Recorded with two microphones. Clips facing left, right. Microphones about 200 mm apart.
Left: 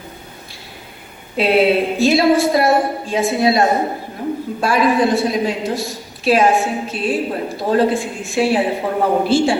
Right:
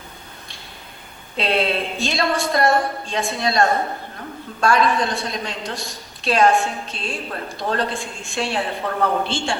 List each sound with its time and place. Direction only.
1.4 s a woman's voice: 5° left (ahead or behind)
3.6 s a man's voice: 15° left (ahead or behind)
4.6 s a woman's voice: 5° left (ahead or behind)
7.3 s a woman's voice: 15° left (ahead or behind)
7.7 s a woman's voice: 5° left (ahead or behind)
8.5 s a woman's voice: 15° left (ahead or behind)
9.2 s a woman's voice: 5° left (ahead or behind)